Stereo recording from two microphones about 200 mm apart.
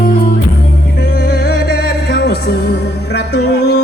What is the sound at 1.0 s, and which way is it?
Music, 50° left (ahead or behind).